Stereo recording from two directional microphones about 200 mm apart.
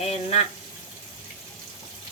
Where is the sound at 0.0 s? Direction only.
35° left (ahead or behind).